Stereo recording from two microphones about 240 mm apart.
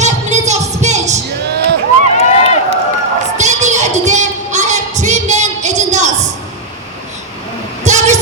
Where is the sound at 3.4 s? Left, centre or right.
Right.